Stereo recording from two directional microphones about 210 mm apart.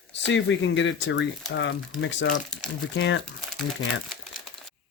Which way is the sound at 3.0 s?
60° left (ahead or behind).